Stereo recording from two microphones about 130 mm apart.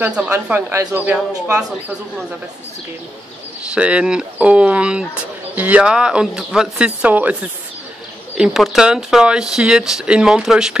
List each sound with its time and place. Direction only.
0.0 s speech: 10° right (ahead or behind)
3.7 s speech: 10° right (ahead or behind)
8.4 s speech: 5° right (ahead or behind)